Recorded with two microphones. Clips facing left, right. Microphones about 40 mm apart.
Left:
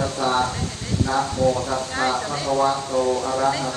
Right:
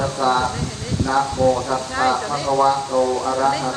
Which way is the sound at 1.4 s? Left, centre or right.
Right.